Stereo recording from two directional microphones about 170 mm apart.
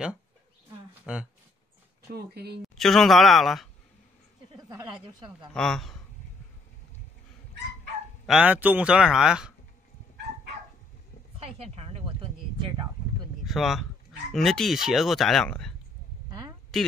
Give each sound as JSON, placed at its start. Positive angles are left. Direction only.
{"t": 1.1, "sound": "speech", "side_deg": -5}
{"t": 2.1, "sound": "speech", "side_deg": -70}
{"t": 2.7, "sound": "speech", "side_deg": 0}
{"t": 4.6, "sound": "speech", "side_deg": -25}
{"t": 5.5, "sound": "speech", "side_deg": 5}
{"t": 8.3, "sound": "speech", "side_deg": -10}
{"t": 11.3, "sound": "a sound", "side_deg": -35}
{"t": 13.4, "sound": "speech", "side_deg": 0}
{"t": 16.3, "sound": "a sound", "side_deg": -25}